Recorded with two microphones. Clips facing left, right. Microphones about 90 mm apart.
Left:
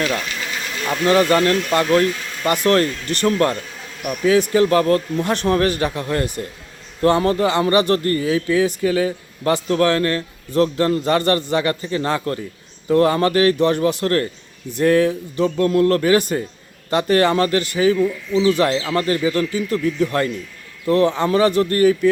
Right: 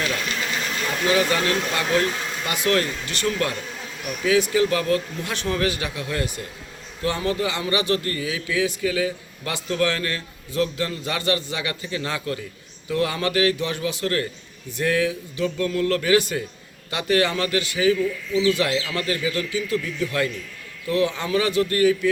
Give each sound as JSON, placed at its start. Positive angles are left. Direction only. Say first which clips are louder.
{"t": 1.0, "sound": "a man's voice", "louder": "left 6 dB", "side_deg": 45}
{"t": 4.0, "sound": "speech", "louder": "left 7 dB", "side_deg": 15}
{"t": 4.3, "sound": "a man's voice", "louder": "left 5 dB", "side_deg": 40}
{"t": 17.9, "sound": "speech", "louder": "left 4 dB", "side_deg": 20}
{"t": 18.5, "sound": "a man's voice", "louder": "left 6 dB", "side_deg": 40}